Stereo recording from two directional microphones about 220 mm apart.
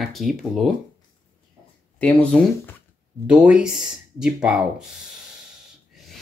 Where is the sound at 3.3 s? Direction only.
5° right (ahead or behind).